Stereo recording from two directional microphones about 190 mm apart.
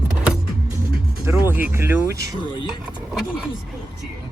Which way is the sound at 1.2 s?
10° right (ahead or behind).